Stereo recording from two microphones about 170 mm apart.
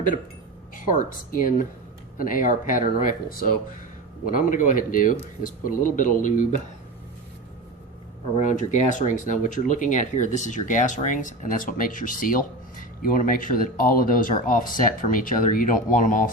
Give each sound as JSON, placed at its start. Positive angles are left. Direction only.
{"t": 0.9, "sound": "speech", "side_deg": 50}
{"t": 8.4, "sound": "speech", "side_deg": 45}